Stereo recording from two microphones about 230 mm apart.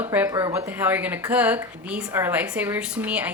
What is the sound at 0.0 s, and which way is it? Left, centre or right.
Speech, centre.